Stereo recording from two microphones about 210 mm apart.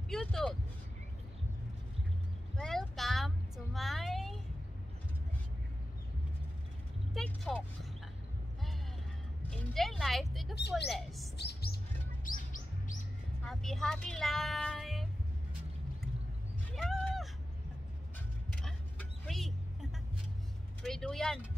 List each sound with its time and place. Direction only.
0.1 s speech: centre (ahead or behind)
2.5 s a sound: centre (ahead or behind)
7.2 s speech: 5° left (ahead or behind)
9.5 s speech: centre (ahead or behind)
11.3 s music: 50° left (ahead or behind)
12.3 s chirp: 40° left (ahead or behind)
13.5 s speech: centre (ahead or behind)
16.7 s a sound: 5° left (ahead or behind)
18.5 s a sound: 5° left (ahead or behind)
20.8 s speech: centre (ahead or behind)